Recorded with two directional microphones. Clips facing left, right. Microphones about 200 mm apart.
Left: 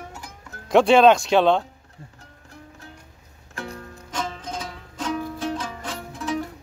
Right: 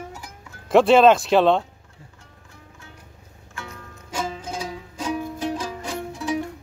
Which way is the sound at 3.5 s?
35° left (ahead or behind).